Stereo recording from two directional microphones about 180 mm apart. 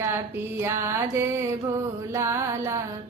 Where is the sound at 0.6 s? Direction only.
15° right (ahead or behind).